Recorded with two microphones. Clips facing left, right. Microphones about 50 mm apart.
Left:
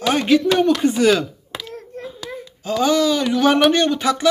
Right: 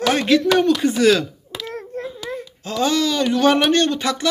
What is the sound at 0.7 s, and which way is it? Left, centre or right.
Speech, left.